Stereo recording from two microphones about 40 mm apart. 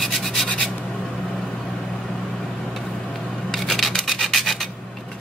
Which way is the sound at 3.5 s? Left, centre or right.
Centre.